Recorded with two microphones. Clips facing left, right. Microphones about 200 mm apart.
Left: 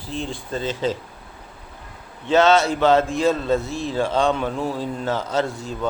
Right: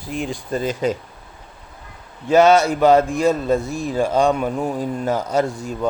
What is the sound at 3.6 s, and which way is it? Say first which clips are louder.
Speech: right 2 dB; centre (ahead or behind).